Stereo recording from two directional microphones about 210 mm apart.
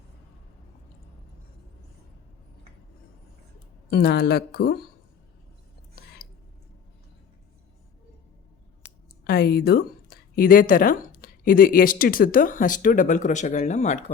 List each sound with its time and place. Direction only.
3.8 s a woman's voice: 50° left (ahead or behind)
9.2 s speech: 50° left (ahead or behind)